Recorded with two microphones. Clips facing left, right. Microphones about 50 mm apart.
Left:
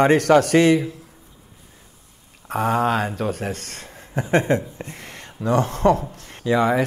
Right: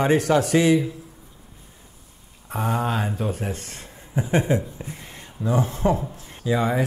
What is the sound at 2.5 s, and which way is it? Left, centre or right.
Speech, left.